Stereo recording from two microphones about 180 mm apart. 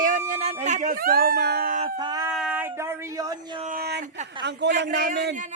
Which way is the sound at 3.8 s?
65° right (ahead or behind).